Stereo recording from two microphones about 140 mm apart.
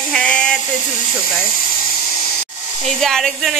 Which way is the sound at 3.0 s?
Centre (ahead or behind).